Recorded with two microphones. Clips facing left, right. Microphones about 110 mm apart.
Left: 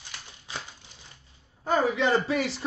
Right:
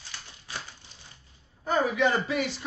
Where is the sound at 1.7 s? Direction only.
25° left (ahead or behind).